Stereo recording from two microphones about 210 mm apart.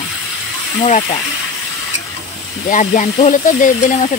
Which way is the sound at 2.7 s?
35° left (ahead or behind).